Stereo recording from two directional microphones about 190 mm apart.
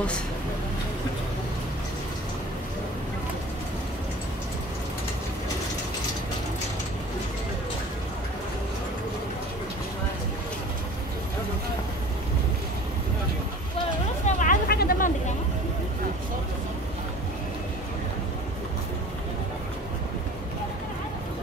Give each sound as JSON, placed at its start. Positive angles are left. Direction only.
{"t": 14.2, "sound": "vehicle", "side_deg": 45}